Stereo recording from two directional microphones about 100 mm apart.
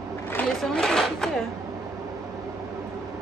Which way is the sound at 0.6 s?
5° left (ahead or behind).